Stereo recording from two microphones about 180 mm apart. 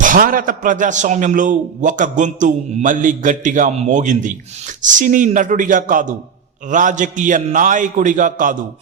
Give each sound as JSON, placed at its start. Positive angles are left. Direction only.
{"t": 0.0, "sound": "a man's voice", "side_deg": -50}